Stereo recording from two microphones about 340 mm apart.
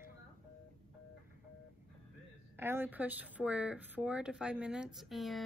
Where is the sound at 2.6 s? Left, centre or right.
Centre.